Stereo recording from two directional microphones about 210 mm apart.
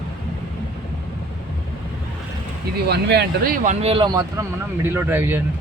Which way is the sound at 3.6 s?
30° right (ahead or behind).